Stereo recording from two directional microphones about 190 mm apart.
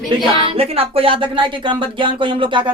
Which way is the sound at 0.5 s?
30° right (ahead or behind).